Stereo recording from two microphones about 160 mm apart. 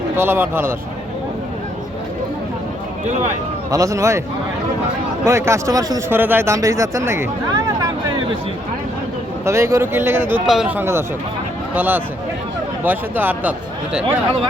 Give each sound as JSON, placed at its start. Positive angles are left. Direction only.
{"t": 0.2, "sound": "a man's voice", "side_deg": -15}
{"t": 3.7, "sound": "speech", "side_deg": -20}
{"t": 5.2, "sound": "speech", "side_deg": -20}
{"t": 9.4, "sound": "a man's voice", "side_deg": -15}